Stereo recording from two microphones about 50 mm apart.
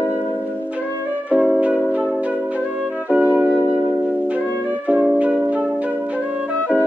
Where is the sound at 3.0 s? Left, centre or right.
Right.